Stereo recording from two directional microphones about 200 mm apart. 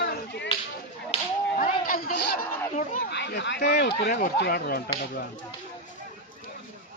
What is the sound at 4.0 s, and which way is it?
Speech, 50° left (ahead or behind).